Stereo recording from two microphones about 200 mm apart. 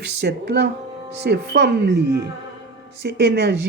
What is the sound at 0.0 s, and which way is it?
Speech, 55° right (ahead or behind).